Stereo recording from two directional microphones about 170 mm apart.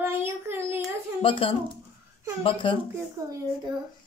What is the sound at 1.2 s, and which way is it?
Speech, 30° left (ahead or behind).